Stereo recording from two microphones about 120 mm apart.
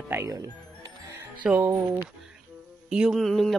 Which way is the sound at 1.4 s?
15° right (ahead or behind).